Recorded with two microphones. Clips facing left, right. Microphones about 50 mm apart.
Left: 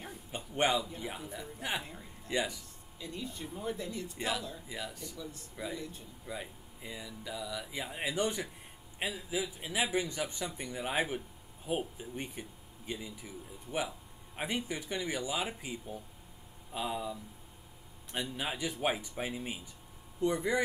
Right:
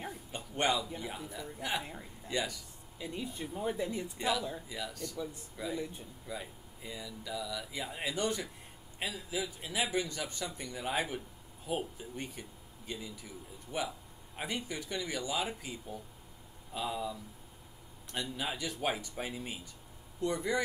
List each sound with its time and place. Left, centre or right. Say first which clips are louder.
0.3 s a sound: left 2 dB; centre
0.9 s a man's voice: even; centre
3.0 s speech: right 2 dB; centre
4.6 s speech: right 1 dB; centre
5.1 s speech: right 4 dB; right
6.2 s speech: left 1 dB; centre